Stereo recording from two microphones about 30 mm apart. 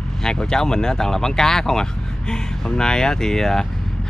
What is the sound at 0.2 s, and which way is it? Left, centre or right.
Speech, left.